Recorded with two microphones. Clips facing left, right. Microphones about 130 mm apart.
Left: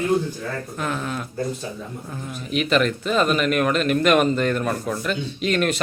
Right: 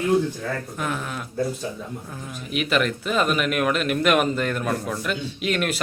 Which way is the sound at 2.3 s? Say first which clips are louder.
Left 3 dB; 5° right (ahead or behind).